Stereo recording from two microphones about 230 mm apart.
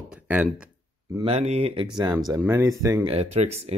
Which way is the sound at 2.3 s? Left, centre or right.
Centre.